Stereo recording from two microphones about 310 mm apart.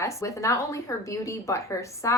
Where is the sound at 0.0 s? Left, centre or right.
Centre.